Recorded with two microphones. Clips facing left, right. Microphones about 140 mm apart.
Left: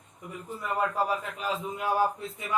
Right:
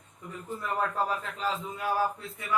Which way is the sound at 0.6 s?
10° left (ahead or behind).